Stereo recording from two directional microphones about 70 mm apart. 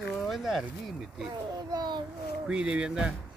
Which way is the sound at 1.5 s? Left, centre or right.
Right.